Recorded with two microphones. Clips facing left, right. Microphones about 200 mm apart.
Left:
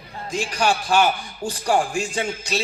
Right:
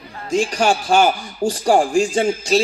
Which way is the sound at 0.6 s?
25° right (ahead or behind).